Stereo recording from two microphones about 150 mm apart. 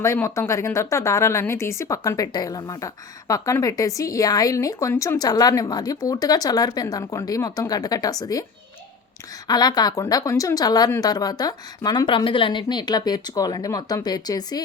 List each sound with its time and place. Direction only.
0.0 s speech: 20° left (ahead or behind)
9.5 s speech: 25° left (ahead or behind)